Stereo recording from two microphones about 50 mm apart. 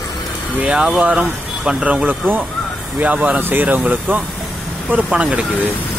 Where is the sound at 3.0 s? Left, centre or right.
Right.